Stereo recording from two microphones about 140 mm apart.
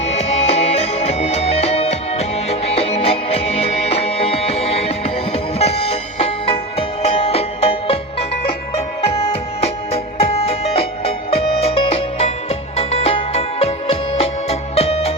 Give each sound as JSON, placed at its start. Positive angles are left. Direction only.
{"t": 0.0, "sound": "music", "side_deg": 50}